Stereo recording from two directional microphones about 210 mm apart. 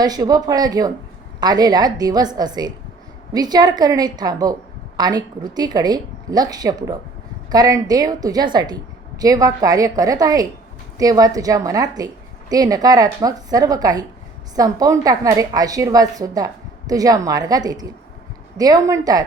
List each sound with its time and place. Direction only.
0.0 s a woman's voice: 20° right (ahead or behind)